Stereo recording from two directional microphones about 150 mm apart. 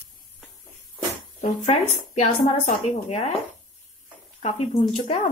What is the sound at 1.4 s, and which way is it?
Speech, 45° left (ahead or behind).